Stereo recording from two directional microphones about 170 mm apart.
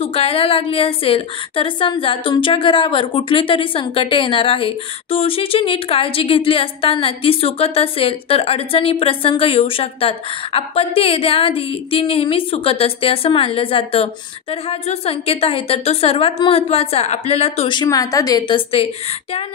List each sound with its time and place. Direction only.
0.0 s a woman's voice: 35° left (ahead or behind)
17.8 s a woman's voice: 20° left (ahead or behind)